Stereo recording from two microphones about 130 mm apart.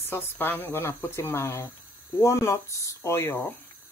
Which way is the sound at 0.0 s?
15° left (ahead or behind).